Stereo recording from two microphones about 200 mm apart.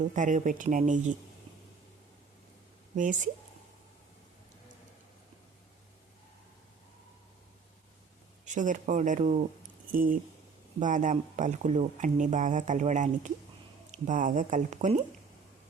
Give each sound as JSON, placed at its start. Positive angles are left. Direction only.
{"t": 0.0, "sound": "speech", "side_deg": -40}
{"t": 2.9, "sound": "speech", "side_deg": -40}
{"t": 8.4, "sound": "speech", "side_deg": -40}